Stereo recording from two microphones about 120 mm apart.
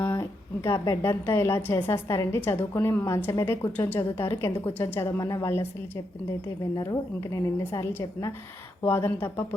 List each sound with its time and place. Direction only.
0.0 s a woman's voice: 20° left (ahead or behind)
7.6 s a woman's voice: 20° left (ahead or behind)